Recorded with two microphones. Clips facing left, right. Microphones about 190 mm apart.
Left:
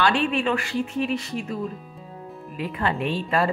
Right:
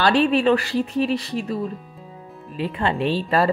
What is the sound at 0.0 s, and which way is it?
Speech, 35° right (ahead or behind).